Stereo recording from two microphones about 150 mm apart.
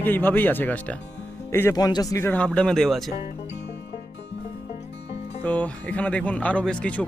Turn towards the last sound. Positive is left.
turn(degrees=10)  # may be behind; listen again after turning